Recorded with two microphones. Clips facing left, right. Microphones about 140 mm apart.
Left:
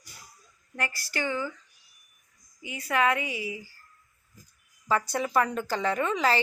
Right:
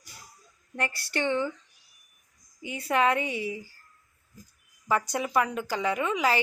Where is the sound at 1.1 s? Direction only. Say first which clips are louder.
Right 4 dB; 25° right (ahead or behind).